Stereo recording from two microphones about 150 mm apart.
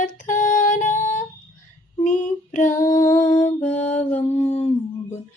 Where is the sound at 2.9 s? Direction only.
55° left (ahead or behind).